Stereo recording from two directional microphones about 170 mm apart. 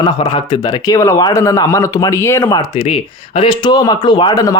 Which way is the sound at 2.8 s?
35° left (ahead or behind).